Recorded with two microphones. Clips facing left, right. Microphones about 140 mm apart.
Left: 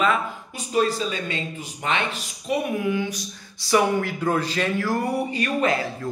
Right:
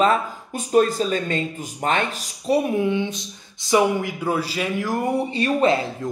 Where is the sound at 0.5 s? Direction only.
45° right (ahead or behind).